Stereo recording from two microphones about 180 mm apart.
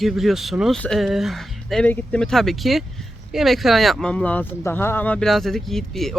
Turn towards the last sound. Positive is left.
turn(degrees=0)  # may be behind; listen again after turning